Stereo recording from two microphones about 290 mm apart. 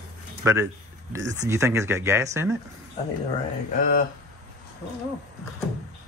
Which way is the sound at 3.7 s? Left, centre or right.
Left.